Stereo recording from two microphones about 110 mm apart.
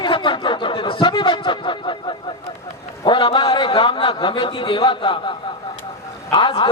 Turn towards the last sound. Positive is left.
turn(degrees=50)  # may be behind; listen again after turning